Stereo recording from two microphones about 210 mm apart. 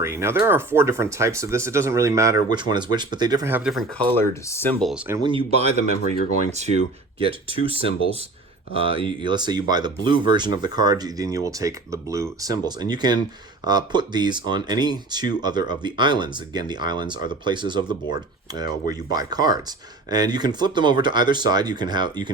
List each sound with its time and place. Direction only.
0.0 s speech: 10° right (ahead or behind)
4.2 s speech: 10° left (ahead or behind)
4.8 s speech: centre (ahead or behind)
5.0 s speech: 15° right (ahead or behind)
5.3 s speech: 30° right (ahead or behind)